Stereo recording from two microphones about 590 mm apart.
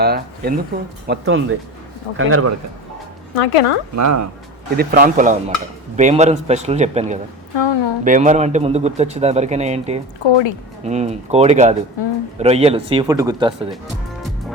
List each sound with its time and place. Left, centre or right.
0.0 s a man's voice: centre
3.3 s speech: left
3.9 s speech: right
4.8 s a man's voice: centre
7.5 s a woman's voice: left
8.0 s a man's voice: centre
10.2 s a woman's voice: left
10.8 s a man's voice: centre